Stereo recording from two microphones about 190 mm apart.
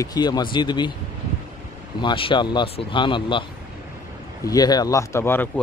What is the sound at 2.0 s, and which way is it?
Speech, 25° left (ahead or behind).